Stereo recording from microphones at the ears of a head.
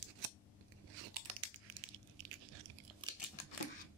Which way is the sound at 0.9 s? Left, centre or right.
Right.